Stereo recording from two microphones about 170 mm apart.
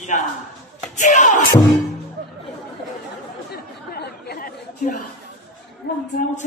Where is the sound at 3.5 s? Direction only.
65° left (ahead or behind).